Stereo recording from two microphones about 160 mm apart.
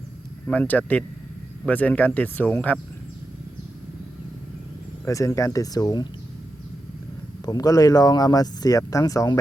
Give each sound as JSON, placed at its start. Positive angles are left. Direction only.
{"t": 0.4, "sound": "speech", "side_deg": 10}
{"t": 5.0, "sound": "speech", "side_deg": 20}
{"t": 7.4, "sound": "speech", "side_deg": 25}